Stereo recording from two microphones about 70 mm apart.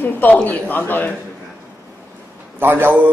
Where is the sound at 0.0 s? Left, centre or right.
Left.